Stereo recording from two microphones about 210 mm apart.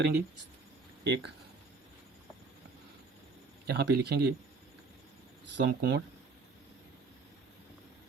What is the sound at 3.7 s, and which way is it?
Speech, 50° right (ahead or behind).